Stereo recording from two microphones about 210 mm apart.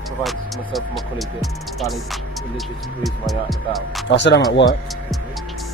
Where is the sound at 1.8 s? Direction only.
Centre (ahead or behind).